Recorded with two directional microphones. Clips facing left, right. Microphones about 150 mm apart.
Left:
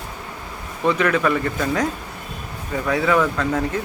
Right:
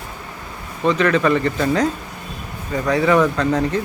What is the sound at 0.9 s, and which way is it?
Speech, 10° left (ahead or behind).